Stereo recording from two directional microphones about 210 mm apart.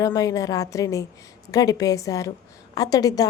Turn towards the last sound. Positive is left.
turn(degrees=15)  # may be behind; listen again after turning